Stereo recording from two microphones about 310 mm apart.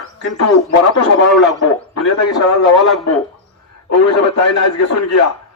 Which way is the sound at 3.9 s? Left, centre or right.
Left.